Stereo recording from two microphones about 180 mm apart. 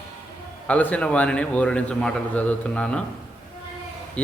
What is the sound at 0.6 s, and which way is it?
A man's voice, 10° left (ahead or behind).